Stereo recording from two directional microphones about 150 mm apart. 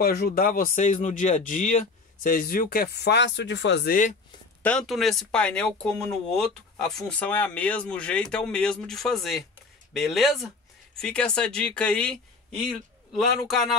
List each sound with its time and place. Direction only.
0.0 s speech: 90° left
3.8 s speech: 65° left (ahead or behind)
4.6 s speech: 5° left (ahead or behind)